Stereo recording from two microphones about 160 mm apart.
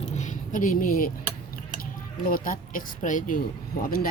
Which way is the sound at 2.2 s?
60° left (ahead or behind).